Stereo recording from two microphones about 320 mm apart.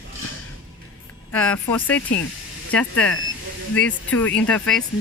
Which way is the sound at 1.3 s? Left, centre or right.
Centre.